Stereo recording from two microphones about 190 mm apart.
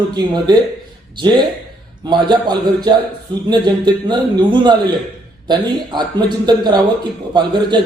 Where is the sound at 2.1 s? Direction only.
25° right (ahead or behind).